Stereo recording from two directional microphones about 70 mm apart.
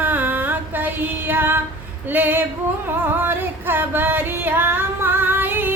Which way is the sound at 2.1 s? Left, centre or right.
Right.